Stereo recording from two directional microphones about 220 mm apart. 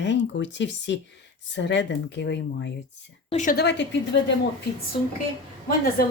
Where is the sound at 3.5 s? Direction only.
50° left (ahead or behind).